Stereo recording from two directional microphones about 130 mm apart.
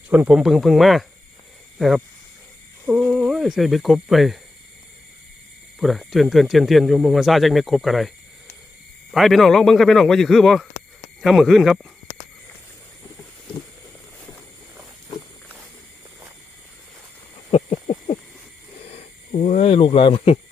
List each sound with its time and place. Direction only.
0.1 s speech: 10° right (ahead or behind)
2.8 s speech: 10° right (ahead or behind)
5.8 s speech: centre (ahead or behind)
17.5 s a sound: 50° left (ahead or behind)
18.9 s speech: 60° left (ahead or behind)